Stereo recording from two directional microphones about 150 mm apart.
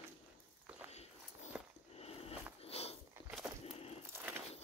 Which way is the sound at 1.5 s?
5° right (ahead or behind).